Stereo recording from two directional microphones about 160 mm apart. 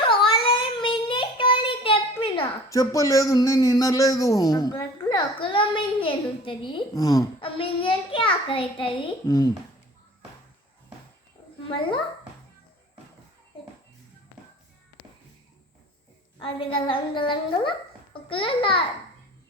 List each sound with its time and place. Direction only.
0.0 s child singing: 30° left (ahead or behind)
2.6 s speech: 20° left (ahead or behind)
16.4 s a child's voice: 35° left (ahead or behind)